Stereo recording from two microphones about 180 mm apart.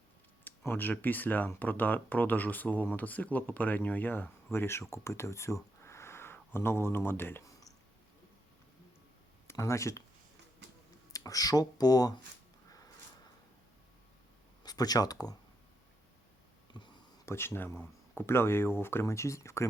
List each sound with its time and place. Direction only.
0.4 s speech: 10° left (ahead or behind)
9.5 s speech: 15° left (ahead or behind)
11.1 s speech: 20° left (ahead or behind)
14.6 s speech: 20° left (ahead or behind)
16.7 s a sound: 25° left (ahead or behind)
17.2 s speech: 15° left (ahead or behind)